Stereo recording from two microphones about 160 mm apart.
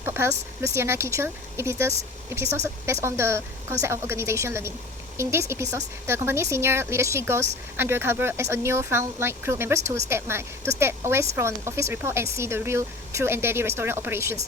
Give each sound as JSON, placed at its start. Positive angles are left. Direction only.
{"t": 0.0, "sound": "speech", "side_deg": -15}